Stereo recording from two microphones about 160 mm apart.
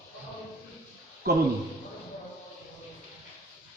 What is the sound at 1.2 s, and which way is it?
Speech, 70° right (ahead or behind).